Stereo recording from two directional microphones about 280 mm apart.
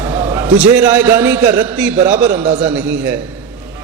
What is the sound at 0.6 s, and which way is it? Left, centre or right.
A man's voice, centre.